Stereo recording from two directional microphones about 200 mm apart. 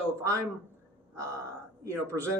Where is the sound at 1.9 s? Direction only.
15° right (ahead or behind).